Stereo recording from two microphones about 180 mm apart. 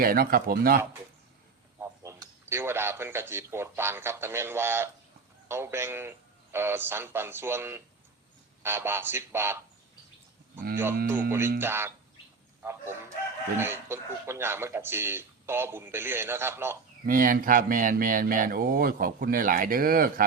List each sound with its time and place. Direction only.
0.0 s speech: 55° right (ahead or behind)
1.8 s speech: 15° right (ahead or behind)
11.3 s speech: 15° right (ahead or behind)
17.1 s speech: 50° right (ahead or behind)